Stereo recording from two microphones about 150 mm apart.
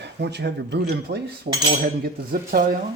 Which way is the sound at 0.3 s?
90° right.